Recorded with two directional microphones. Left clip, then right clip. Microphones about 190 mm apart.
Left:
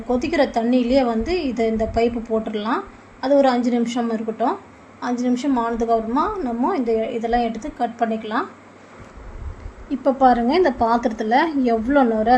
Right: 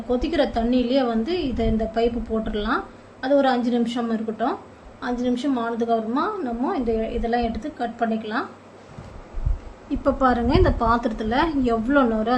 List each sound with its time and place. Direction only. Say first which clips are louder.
0.1 s a woman's voice: left 3 dB; 15° left (ahead or behind)
9.9 s a woman's voice: left 4 dB; 10° left (ahead or behind)